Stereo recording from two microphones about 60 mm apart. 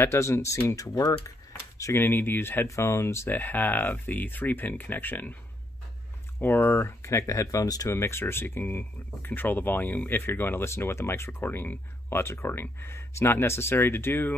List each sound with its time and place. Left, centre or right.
0.0 s speech: left
2.0 s speech: left
2.7 s speech: left
3.3 s speech: left
6.4 s speech: left
7.9 s speech: left
10.6 s speech: left
12.2 s speech: left